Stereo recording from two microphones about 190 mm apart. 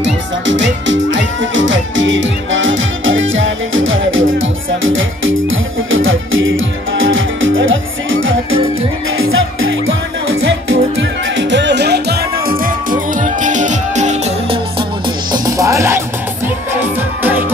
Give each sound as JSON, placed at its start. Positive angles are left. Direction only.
{"t": 0.0, "sound": "music", "side_deg": -80}
{"t": 13.2, "sound": "music", "side_deg": -40}
{"t": 15.3, "sound": "music", "side_deg": -20}